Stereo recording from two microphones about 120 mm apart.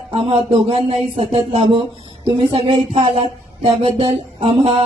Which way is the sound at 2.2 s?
50° right (ahead or behind).